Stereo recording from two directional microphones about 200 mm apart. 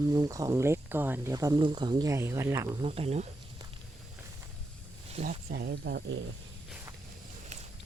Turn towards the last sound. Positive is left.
turn(degrees=-50)  # may be behind; listen again after turning